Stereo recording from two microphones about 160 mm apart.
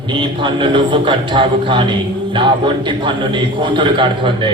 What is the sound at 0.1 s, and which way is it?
A man's voice, 30° right (ahead or behind).